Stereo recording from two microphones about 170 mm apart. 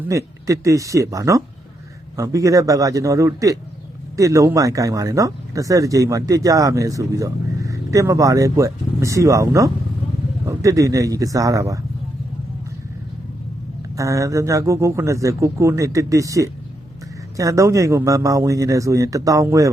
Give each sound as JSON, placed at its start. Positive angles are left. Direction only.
{"t": 0.1, "sound": "speech", "side_deg": -20}
{"t": 13.9, "sound": "speech", "side_deg": -20}